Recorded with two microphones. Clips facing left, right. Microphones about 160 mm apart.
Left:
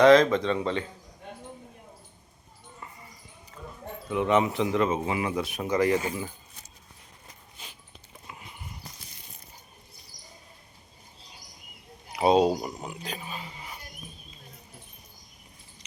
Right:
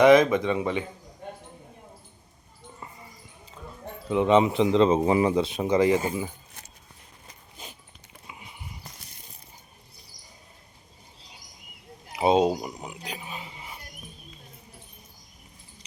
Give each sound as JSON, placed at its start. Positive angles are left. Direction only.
{"t": 0.0, "sound": "speech", "side_deg": -15}
{"t": 2.8, "sound": "basketball bounce", "side_deg": -25}
{"t": 4.1, "sound": "speech", "side_deg": -20}
{"t": 4.9, "sound": "speech", "side_deg": -35}
{"t": 8.3, "sound": "a sound", "side_deg": -5}
{"t": 12.1, "sound": "speech", "side_deg": -20}